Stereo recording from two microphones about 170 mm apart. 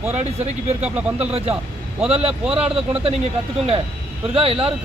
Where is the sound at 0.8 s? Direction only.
10° right (ahead or behind).